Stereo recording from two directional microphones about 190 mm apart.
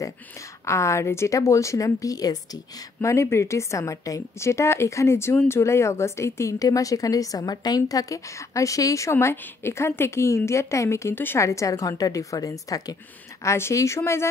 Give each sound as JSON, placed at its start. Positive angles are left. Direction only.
{"t": 0.7, "sound": "speech", "side_deg": 15}